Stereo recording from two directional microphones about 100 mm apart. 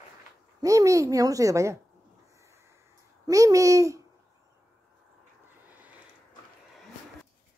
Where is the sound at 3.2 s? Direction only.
35° right (ahead or behind).